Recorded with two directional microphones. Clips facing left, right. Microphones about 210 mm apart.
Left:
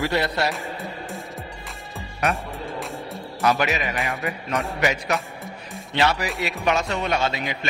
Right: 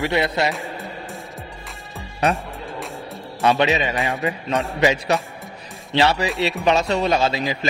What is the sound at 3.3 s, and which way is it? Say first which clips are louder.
A man's voice: right 4 dB; 30° right (ahead or behind).